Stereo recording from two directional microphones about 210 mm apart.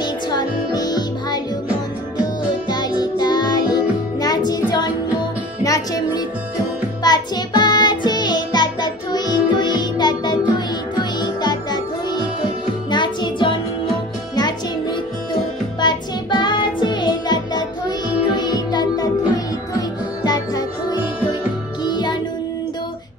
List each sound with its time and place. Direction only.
0.0 s music: 20° left (ahead or behind)
2.7 s music: 20° left (ahead or behind)
15.8 s music: 20° left (ahead or behind)
21.8 s music: 20° left (ahead or behind)